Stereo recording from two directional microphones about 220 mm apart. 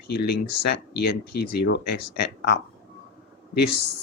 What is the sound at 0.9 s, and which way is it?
Speech, 45° left (ahead or behind).